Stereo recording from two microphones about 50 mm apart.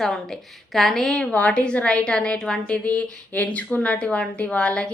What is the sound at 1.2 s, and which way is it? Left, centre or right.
A woman's voice, left.